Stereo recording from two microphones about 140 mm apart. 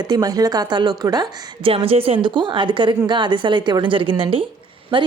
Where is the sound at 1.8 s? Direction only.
40° right (ahead or behind).